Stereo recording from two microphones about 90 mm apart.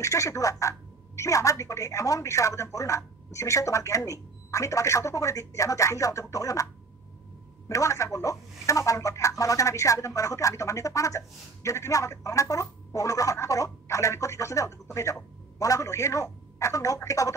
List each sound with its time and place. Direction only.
0.0 s speech: 35° left (ahead or behind)